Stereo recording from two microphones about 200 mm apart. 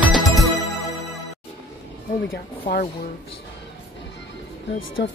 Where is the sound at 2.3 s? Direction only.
55° left (ahead or behind).